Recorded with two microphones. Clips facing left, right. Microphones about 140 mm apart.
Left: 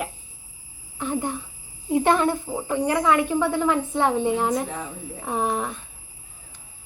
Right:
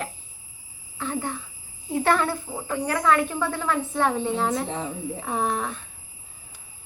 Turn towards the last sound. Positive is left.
turn(degrees=10)  # may be behind; listen again after turning